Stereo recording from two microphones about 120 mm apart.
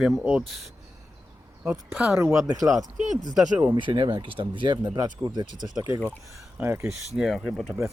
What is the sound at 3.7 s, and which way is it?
Speech, 40° right (ahead or behind).